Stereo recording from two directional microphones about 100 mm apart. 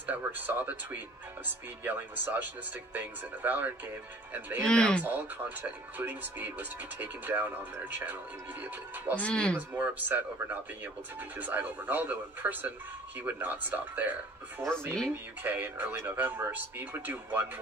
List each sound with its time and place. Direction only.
0.0 s speech: 15° right (ahead or behind)
4.6 s speech: 10° left (ahead or behind)
5.0 s speech: 20° right (ahead or behind)
9.2 s speech: 10° left (ahead or behind)
9.6 s speech: 15° right (ahead or behind)